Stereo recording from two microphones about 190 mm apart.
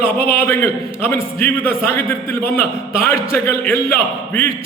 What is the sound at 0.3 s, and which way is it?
A man's voice, 10° left (ahead or behind).